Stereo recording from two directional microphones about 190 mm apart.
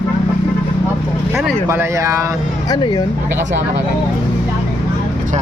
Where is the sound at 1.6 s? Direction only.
15° right (ahead or behind).